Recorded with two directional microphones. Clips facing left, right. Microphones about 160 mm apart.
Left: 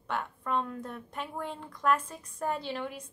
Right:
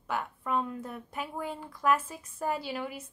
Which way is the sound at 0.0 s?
5° right (ahead or behind).